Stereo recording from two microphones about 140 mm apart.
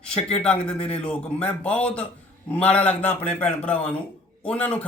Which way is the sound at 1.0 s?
10° left (ahead or behind).